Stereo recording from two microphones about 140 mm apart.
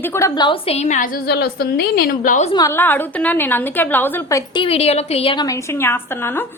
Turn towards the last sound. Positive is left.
turn(degrees=15)  # may be behind; listen again after turning